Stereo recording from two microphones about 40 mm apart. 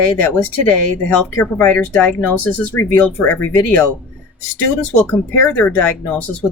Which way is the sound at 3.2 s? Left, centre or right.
Left.